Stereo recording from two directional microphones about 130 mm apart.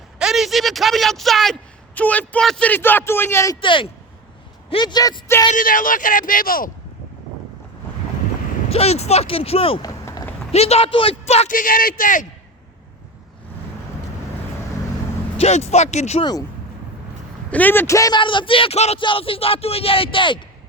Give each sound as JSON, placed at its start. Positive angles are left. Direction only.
{"t": 0.2, "sound": "speech", "side_deg": -5}
{"t": 2.0, "sound": "speech", "side_deg": 10}
{"t": 3.6, "sound": "speech", "side_deg": 40}
{"t": 5.5, "sound": "speech", "side_deg": 90}
{"t": 8.7, "sound": "speech", "side_deg": 55}
{"t": 9.8, "sound": "a sound", "side_deg": 30}
{"t": 10.5, "sound": "speech", "side_deg": 50}
{"t": 11.4, "sound": "speech", "side_deg": 90}
{"t": 15.4, "sound": "speech", "side_deg": 55}
{"t": 17.5, "sound": "speech", "side_deg": 15}
{"t": 18.2, "sound": "speech", "side_deg": 40}